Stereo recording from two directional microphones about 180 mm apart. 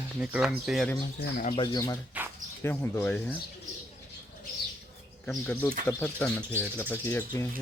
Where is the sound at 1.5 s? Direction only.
30° left (ahead or behind); by 3.3 s 10° left (ahead or behind).